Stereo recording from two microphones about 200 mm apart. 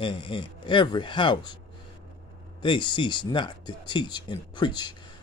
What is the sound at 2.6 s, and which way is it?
Speech, 25° left (ahead or behind).